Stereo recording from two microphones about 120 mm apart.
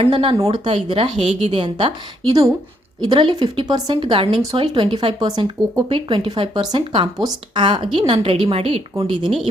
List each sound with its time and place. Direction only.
0.0 s speech: 45° right (ahead or behind)
9.2 s speech: 5° right (ahead or behind)